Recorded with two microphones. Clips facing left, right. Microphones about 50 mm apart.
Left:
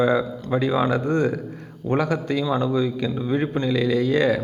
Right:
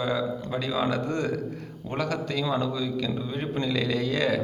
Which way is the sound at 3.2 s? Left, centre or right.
Left.